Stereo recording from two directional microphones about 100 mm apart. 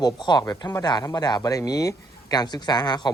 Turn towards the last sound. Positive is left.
turn(degrees=45)  # may be behind; listen again after turning